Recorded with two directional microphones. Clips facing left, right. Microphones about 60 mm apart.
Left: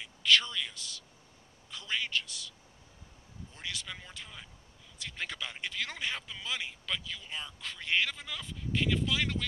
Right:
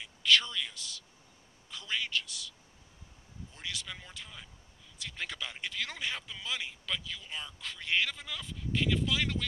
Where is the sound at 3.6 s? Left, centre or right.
Left.